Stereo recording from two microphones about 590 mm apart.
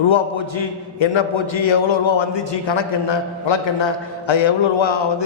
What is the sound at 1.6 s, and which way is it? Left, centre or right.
A man's voice, left.